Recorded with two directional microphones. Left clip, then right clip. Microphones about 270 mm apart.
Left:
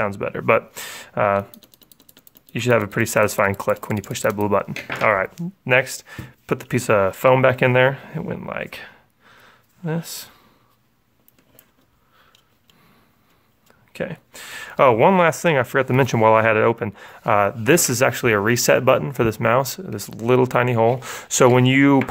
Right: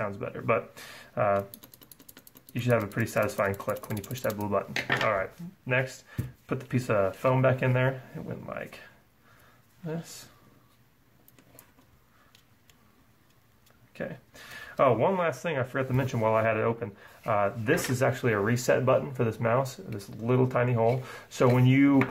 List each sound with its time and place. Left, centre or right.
0.0 s speech: left
2.5 s speech: left
13.9 s speech: left